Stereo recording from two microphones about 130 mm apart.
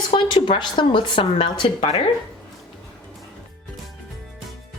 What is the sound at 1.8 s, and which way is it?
Speech, 55° left (ahead or behind).